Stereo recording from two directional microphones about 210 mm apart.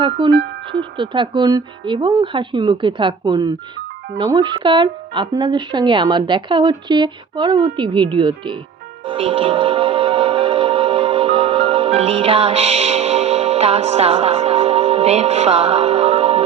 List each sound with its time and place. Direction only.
0.0 s speech: 25° right (ahead or behind)
9.0 s music: 25° right (ahead or behind)